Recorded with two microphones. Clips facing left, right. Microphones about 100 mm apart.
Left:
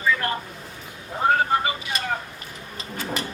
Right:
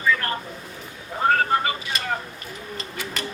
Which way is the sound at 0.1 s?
15° left (ahead or behind).